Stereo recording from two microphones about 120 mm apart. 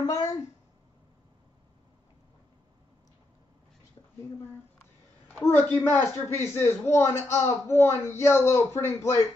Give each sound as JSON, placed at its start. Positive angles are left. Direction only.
{"t": 0.0, "sound": "speech", "side_deg": 30}
{"t": 5.7, "sound": "a man's voice", "side_deg": 15}